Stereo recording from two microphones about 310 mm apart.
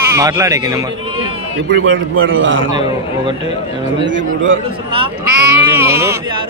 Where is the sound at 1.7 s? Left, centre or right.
Right.